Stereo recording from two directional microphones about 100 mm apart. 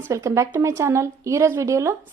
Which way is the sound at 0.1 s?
30° right (ahead or behind).